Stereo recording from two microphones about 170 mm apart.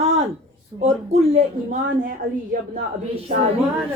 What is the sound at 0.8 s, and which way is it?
Speech, 40° right (ahead or behind).